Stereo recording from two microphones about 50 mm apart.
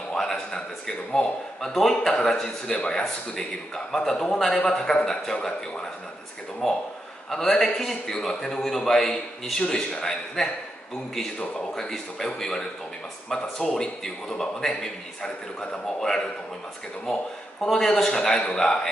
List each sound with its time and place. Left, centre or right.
0.1 s a man's voice: centre
9.6 s a man's voice: centre